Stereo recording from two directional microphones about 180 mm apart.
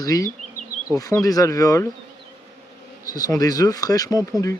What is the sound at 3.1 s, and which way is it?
Speech, 20° left (ahead or behind).